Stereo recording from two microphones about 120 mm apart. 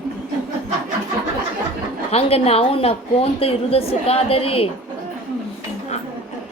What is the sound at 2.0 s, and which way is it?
A woman's voice, 55° left (ahead or behind).